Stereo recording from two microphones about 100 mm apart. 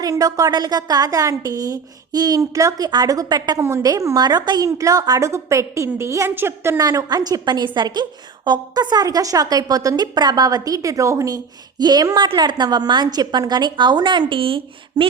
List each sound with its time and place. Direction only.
0.0 s a woman's voice: 35° right (ahead or behind)
3.6 s a woman's voice: 30° right (ahead or behind)
6.7 s a woman's voice: 40° right (ahead or behind)
11.8 s a woman's voice: 45° right (ahead or behind); by 15.0 s 60° right (ahead or behind)